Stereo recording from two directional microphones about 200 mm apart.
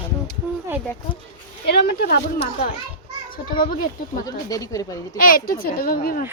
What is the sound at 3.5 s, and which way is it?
Speech, 45° left (ahead or behind).